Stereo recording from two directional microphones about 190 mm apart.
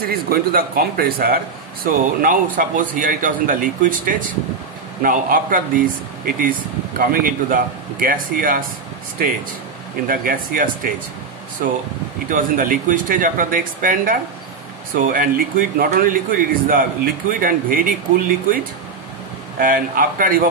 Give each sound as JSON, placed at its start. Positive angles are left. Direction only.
{"t": 0.0, "sound": "a man's voice", "side_deg": -50}
{"t": 10.0, "sound": "a man's voice", "side_deg": -50}
{"t": 12.3, "sound": "a man's voice", "side_deg": -45}
{"t": 19.6, "sound": "a man's voice", "side_deg": -45}